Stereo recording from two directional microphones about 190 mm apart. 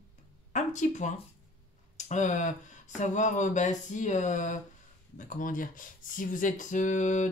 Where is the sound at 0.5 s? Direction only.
40° left (ahead or behind).